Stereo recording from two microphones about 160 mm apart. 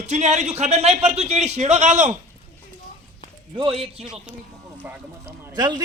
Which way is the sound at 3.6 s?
35° right (ahead or behind).